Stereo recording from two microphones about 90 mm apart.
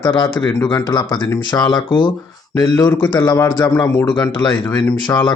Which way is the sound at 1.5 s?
55° left (ahead or behind).